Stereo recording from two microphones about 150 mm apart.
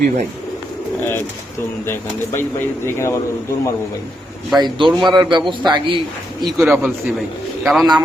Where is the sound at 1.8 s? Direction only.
15° left (ahead or behind).